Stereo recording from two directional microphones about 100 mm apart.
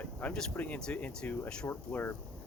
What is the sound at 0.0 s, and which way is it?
Speech, 15° left (ahead or behind).